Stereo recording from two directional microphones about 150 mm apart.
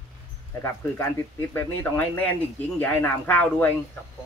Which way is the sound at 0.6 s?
15° left (ahead or behind).